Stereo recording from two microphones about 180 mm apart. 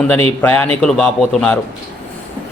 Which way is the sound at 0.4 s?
10° left (ahead or behind).